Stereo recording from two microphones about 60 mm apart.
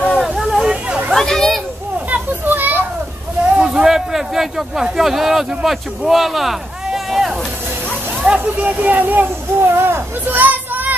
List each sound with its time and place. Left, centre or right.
0.3 s a sound: centre
0.8 s a sound: centre
1.1 s children playing: centre
2.0 s children playing: right
3.4 s a man's voice: centre
8.2 s speech: centre
8.6 s speech: right